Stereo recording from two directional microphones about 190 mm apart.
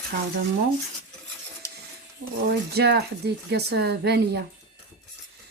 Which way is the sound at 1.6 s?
15° left (ahead or behind).